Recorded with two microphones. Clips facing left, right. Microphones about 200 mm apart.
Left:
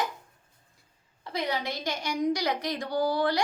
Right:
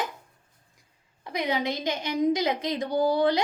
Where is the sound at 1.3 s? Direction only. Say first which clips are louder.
Right 3 dB; 20° right (ahead or behind).